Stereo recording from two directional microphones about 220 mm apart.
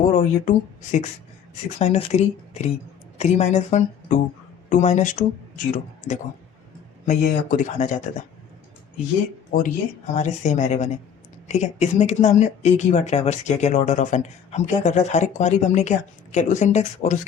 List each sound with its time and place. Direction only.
0.1 s speech: 35° left (ahead or behind)
9.5 s speech: 35° left (ahead or behind)